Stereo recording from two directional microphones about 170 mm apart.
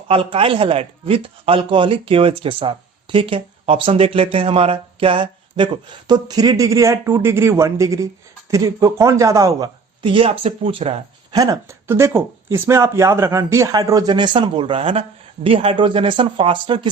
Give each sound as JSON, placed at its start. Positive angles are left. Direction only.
{"t": 0.1, "sound": "a man's voice", "side_deg": -30}
{"t": 11.3, "sound": "speech", "side_deg": -20}